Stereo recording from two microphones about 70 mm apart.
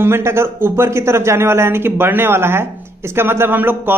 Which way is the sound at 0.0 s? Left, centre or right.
Right.